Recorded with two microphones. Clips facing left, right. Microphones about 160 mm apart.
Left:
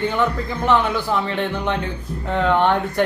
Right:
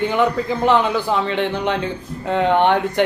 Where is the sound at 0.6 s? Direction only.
20° right (ahead or behind).